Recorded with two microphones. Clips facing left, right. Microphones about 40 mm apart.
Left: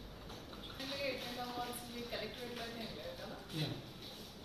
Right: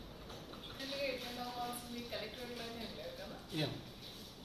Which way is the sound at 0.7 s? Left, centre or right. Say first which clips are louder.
Right 1 dB; left.